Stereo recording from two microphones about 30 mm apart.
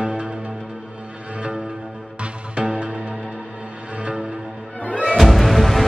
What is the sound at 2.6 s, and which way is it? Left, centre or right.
Music, right.